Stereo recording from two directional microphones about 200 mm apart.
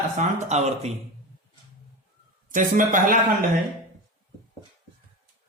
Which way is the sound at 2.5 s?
40° right (ahead or behind).